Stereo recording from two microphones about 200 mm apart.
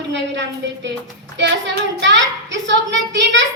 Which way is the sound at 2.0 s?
65° right (ahead or behind).